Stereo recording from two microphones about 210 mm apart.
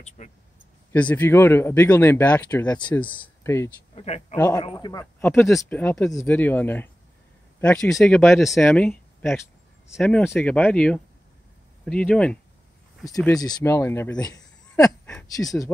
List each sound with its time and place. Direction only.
0.2 s speech: 35° left (ahead or behind)
0.9 s speech: 5° left (ahead or behind)
3.9 s speech: 30° left (ahead or behind)
4.4 s speech: 15° left (ahead or behind)
13.1 s speech: 15° left (ahead or behind)